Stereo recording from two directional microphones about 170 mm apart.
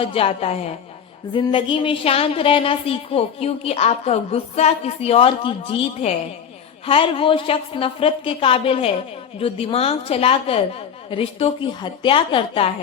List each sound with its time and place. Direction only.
0.0 s a woman's voice: 35° left (ahead or behind)